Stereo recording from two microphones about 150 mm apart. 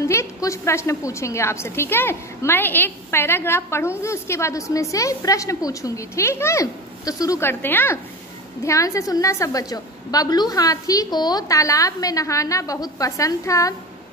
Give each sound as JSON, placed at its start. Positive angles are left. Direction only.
{"t": 0.0, "sound": "a woman's voice", "side_deg": 20}